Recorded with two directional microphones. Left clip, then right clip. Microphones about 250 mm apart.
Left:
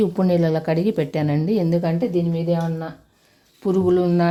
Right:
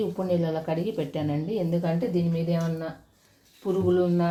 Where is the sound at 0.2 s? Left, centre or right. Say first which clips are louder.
Left 7 dB; left.